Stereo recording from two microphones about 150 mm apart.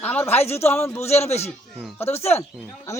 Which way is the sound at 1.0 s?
45° left (ahead or behind).